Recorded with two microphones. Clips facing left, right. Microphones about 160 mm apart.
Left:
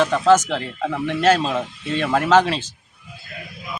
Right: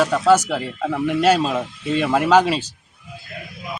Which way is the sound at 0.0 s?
5° right (ahead or behind).